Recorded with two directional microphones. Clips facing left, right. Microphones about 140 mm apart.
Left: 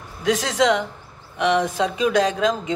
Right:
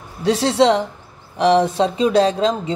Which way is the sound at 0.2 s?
30° right (ahead or behind).